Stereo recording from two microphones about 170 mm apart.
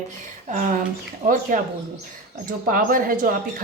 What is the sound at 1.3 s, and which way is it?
Speech, 50° right (ahead or behind).